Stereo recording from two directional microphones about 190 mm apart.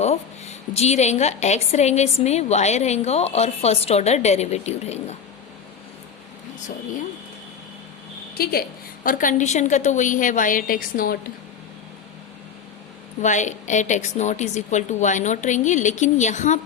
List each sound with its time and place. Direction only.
0.0 s a sound: 35° left (ahead or behind)
0.8 s a woman's voice: 35° left (ahead or behind)
9.0 s a woman's voice: 45° left (ahead or behind)
13.2 s a woman's voice: 40° left (ahead or behind)